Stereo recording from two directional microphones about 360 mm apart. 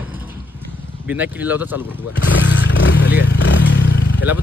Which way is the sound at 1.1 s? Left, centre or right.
Centre.